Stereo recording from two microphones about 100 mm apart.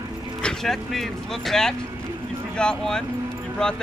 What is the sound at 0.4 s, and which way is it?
Speech, 5° left (ahead or behind).